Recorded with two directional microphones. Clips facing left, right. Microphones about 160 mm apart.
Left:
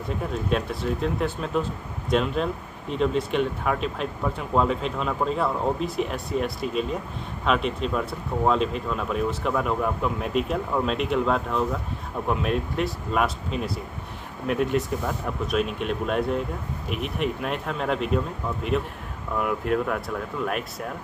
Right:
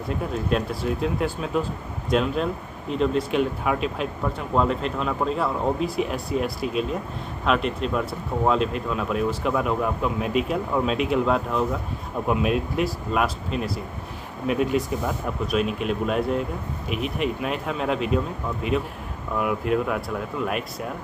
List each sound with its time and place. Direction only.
0.3 s speech: centre (ahead or behind)